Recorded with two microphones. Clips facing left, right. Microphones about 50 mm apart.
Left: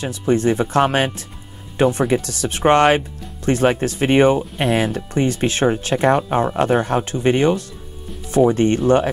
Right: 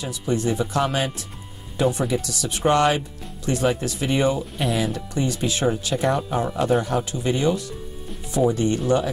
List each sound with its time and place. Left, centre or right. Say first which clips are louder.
0.0 s speech: left 6 dB; left